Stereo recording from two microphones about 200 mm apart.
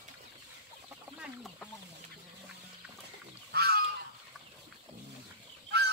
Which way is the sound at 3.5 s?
50° right (ahead or behind).